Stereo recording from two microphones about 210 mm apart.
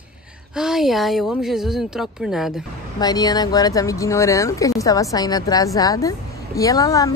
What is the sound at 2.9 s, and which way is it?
Speech, 20° left (ahead or behind).